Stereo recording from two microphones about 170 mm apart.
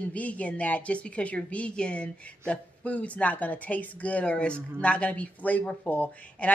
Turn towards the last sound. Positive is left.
turn(degrees=10)  # may be behind; listen again after turning